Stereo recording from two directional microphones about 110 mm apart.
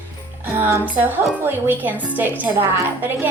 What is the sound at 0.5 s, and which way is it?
A woman's voice, 15° right (ahead or behind).